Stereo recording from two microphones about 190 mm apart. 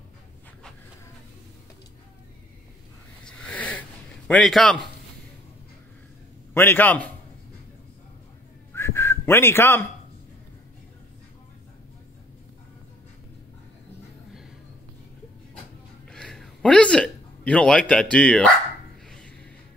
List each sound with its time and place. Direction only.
3.3 s a sound: 5° left (ahead or behind)
4.3 s a man's voice: centre (ahead or behind)
6.5 s a man's voice: 10° left (ahead or behind)
8.7 s whistling: 10° left (ahead or behind)
16.1 s a sound: 5° left (ahead or behind)
18.1 s a man's voice: 5° left (ahead or behind)
19.0 s music: 5° left (ahead or behind)